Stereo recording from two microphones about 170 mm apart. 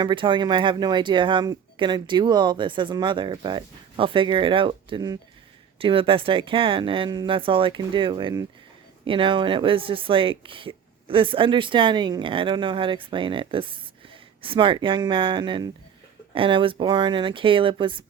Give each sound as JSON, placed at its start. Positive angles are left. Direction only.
{"t": 0.0, "sound": "speech", "side_deg": -25}